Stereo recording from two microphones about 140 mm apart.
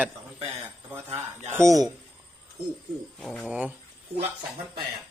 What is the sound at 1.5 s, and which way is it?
Speech, 20° right (ahead or behind).